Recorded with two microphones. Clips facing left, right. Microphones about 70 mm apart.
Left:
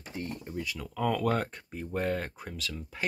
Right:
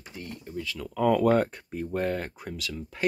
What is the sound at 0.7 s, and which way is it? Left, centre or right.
Speech, centre.